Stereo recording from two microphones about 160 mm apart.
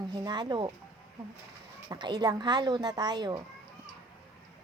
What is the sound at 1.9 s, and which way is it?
A woman's voice, 25° right (ahead or behind).